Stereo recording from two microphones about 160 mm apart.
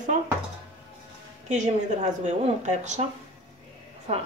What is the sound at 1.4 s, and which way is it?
A woman's voice, 50° right (ahead or behind).